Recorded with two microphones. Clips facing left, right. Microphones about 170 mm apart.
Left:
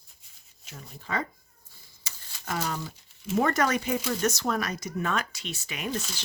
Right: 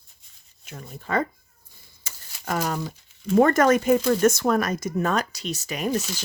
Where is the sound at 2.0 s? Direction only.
50° right (ahead or behind).